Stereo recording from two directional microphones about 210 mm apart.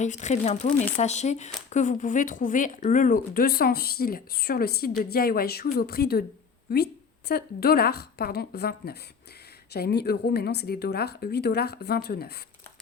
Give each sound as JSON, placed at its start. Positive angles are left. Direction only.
{"t": 0.0, "sound": "speech", "side_deg": 35}
{"t": 7.3, "sound": "speech", "side_deg": 50}